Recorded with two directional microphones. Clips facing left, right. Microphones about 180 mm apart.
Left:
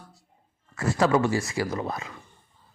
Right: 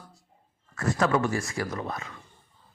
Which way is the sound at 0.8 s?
30° left (ahead or behind).